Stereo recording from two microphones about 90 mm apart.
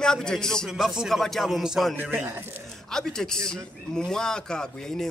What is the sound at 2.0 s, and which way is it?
Speech, 20° right (ahead or behind).